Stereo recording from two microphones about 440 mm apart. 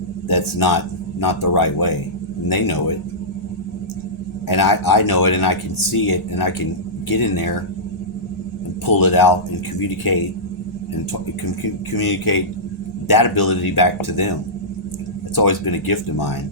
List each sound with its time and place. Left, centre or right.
0.3 s speech: left
4.4 s speech: left
8.9 s speech: left
11.6 s speech: left
15.4 s speech: left